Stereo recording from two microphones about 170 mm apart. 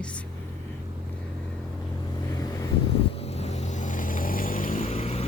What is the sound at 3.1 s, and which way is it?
Vehicle, 35° left (ahead or behind).